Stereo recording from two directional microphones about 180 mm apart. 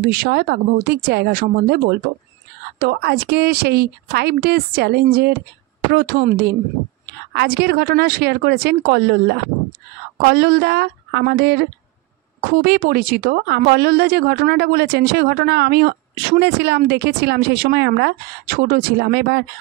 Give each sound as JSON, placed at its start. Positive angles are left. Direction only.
{"t": 0.0, "sound": "speech", "side_deg": -55}